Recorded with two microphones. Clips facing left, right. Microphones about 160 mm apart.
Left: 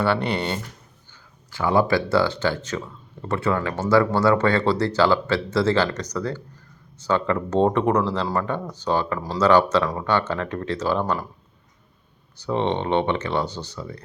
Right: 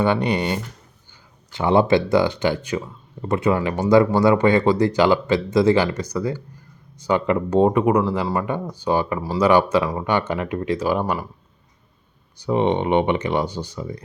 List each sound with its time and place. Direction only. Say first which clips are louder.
0.0 s speech: right 3 dB; 15° right (ahead or behind)
12.4 s speech: right 4 dB; 15° right (ahead or behind)